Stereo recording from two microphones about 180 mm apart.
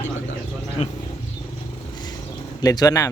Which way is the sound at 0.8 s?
40° left (ahead or behind).